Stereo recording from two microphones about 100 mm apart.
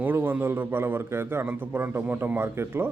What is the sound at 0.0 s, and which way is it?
Speech, 20° right (ahead or behind).